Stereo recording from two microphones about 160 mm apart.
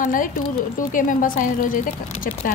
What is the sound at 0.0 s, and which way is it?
A woman's voice, 55° left (ahead or behind).